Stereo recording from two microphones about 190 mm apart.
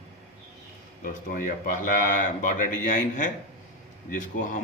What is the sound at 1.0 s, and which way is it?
Speech, 45° left (ahead or behind).